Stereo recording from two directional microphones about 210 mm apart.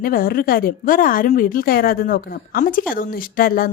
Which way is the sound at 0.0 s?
45° left (ahead or behind).